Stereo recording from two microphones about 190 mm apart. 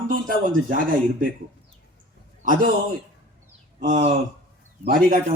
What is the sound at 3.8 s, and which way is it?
A man's voice, 45° right (ahead or behind).